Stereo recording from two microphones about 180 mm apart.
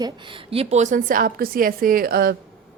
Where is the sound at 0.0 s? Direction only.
30° right (ahead or behind); by 2.3 s 55° right (ahead or behind).